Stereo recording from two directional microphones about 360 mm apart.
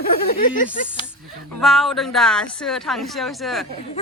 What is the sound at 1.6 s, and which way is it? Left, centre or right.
Speech, centre.